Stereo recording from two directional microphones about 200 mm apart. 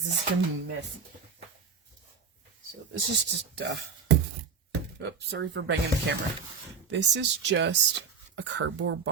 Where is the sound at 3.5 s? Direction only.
60° right (ahead or behind).